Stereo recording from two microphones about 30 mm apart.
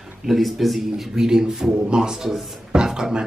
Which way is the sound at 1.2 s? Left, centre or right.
Right.